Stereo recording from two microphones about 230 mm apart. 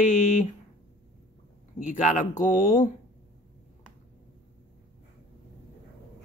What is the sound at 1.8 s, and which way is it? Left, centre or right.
Speech, left.